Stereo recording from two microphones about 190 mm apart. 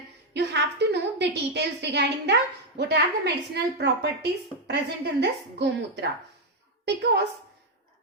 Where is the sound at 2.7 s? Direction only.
60° right (ahead or behind).